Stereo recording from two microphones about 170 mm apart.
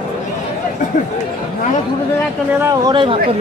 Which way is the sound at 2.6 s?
20° right (ahead or behind).